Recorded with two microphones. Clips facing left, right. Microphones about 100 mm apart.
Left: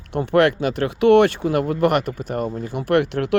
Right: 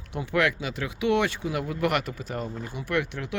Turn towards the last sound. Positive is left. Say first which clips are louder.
# left 10 dB
turn(degrees=70)  # may be behind; listen again after turning